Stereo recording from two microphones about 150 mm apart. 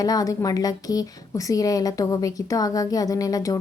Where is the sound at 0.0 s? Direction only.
25° left (ahead or behind).